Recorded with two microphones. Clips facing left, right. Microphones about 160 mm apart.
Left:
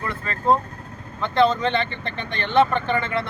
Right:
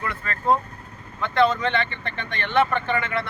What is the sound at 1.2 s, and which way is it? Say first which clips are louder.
Speech: left 1 dB; 25° left (ahead or behind).